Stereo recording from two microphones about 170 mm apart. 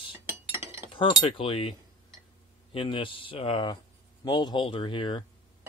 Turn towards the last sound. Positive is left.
turn(degrees=30)  # may be behind; listen again after turning